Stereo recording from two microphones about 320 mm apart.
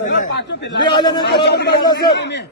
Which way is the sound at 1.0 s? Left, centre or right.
Centre.